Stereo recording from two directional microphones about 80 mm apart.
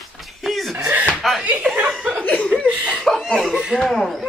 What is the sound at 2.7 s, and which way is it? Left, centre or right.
Chuckle, centre.